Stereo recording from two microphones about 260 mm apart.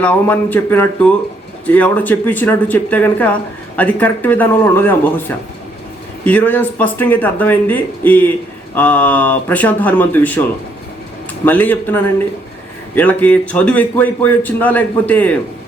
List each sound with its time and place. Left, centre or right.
0.0 s a man's voice: centre
6.2 s a man's voice: centre
11.4 s a man's voice: centre